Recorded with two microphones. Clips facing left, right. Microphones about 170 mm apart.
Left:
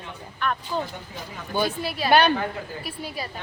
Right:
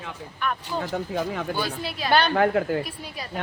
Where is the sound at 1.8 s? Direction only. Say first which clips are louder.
Left 3 dB; 5° left (ahead or behind).